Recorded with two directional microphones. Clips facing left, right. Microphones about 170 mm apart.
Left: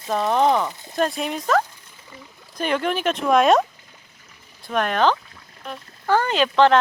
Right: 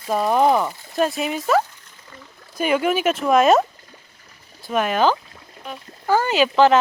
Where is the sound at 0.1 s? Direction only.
5° right (ahead or behind).